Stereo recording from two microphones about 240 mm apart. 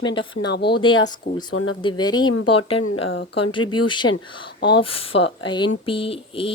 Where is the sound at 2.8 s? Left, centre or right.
Left.